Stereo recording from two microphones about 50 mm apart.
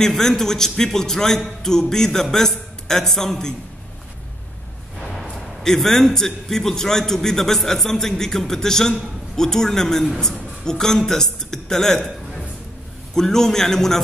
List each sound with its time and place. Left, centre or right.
0.0 s a man's voice: centre
5.0 s a man's voice: centre
13.1 s a man's voice: centre